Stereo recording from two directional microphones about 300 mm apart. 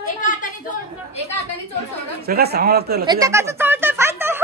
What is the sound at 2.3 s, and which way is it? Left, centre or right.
Speech, right.